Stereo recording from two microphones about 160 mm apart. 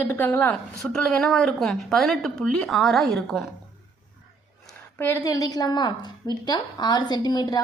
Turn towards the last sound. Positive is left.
turn(degrees=25)  # may be behind; listen again after turning